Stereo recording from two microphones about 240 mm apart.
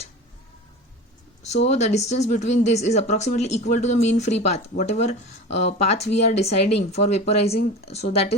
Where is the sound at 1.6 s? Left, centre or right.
Left.